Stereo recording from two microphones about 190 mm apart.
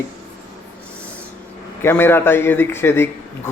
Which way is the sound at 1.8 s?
10° left (ahead or behind).